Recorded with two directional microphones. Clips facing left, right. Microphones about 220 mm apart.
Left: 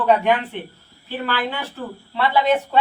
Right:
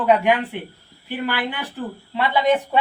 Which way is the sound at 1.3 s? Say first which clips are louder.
Left 1 dB; 15° right (ahead or behind).